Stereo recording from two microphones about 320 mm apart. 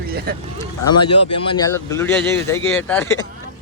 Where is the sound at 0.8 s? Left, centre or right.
Centre.